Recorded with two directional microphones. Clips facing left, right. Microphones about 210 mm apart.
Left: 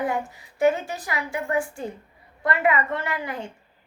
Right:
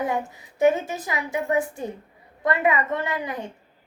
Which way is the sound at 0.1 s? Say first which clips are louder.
Right 1 dB; 20° right (ahead or behind).